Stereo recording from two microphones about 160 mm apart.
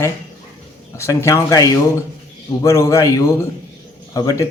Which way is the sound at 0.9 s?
15° left (ahead or behind).